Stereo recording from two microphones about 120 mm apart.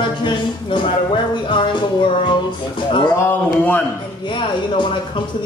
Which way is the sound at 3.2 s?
20° left (ahead or behind).